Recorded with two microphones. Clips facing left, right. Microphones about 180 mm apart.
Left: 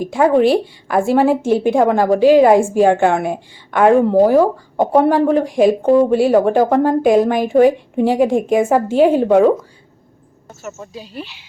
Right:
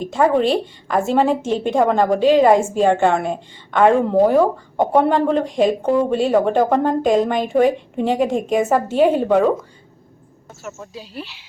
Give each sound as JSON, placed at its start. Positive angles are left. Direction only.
{"t": 0.0, "sound": "a woman's voice", "side_deg": 10}
{"t": 10.6, "sound": "speech", "side_deg": 0}